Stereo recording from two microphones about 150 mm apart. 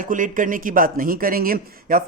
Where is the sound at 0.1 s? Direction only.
60° right (ahead or behind).